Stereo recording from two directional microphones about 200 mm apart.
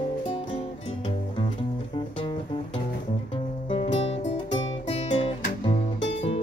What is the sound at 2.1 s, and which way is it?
Music, 25° left (ahead or behind).